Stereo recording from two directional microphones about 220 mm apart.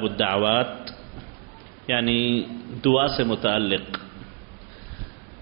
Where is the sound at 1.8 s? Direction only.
10° right (ahead or behind).